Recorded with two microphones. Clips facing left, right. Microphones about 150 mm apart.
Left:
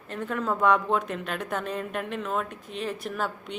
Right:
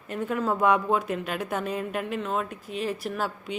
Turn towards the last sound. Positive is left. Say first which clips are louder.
# right 1 dB
turn(degrees=-5)  # may be behind; listen again after turning